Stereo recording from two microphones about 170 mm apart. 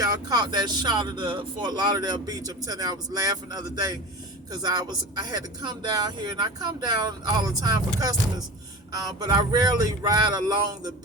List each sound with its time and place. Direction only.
0.0 s speech: 25° right (ahead or behind)